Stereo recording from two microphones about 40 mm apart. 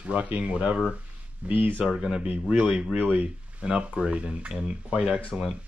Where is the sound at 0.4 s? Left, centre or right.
Right.